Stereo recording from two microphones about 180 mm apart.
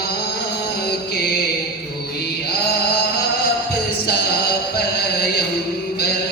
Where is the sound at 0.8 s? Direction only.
60° left (ahead or behind).